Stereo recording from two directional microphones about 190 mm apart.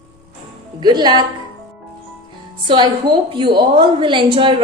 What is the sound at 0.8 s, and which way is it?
Speech, 25° right (ahead or behind).